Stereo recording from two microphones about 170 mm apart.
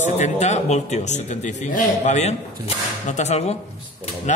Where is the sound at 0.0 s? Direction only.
45° left (ahead or behind).